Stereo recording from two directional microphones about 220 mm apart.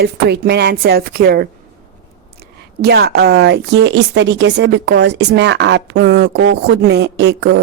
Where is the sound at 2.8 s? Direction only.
45° right (ahead or behind).